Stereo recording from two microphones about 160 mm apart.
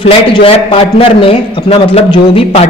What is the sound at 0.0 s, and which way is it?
A man's voice, 35° left (ahead or behind).